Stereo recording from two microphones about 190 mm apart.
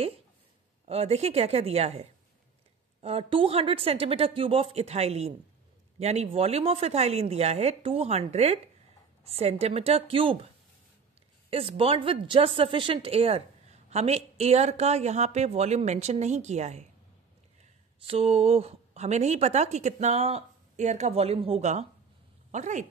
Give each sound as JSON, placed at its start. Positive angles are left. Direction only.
{"t": 0.8, "sound": "a woman's voice", "side_deg": -30}
{"t": 11.5, "sound": "a woman's voice", "side_deg": -30}
{"t": 18.0, "sound": "a woman's voice", "side_deg": -30}